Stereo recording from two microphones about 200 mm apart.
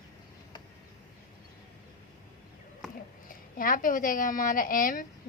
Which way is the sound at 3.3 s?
45° left (ahead or behind).